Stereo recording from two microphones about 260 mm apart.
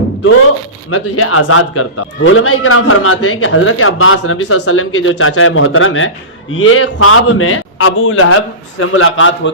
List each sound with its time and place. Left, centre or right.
0.9 s a man's voice: left